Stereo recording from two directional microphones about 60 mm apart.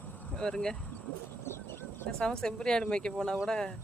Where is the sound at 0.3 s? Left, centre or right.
Centre.